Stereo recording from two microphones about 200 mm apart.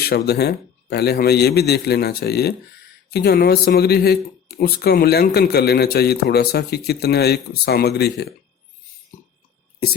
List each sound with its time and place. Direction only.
0.0 s a man's voice: 55° left (ahead or behind)